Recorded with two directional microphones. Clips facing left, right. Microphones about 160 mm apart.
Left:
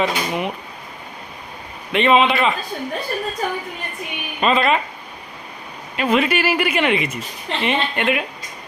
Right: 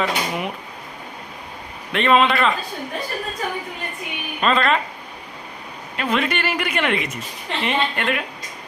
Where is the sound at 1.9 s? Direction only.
Centre (ahead or behind).